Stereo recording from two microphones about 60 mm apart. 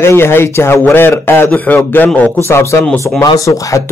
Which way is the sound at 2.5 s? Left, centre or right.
Left.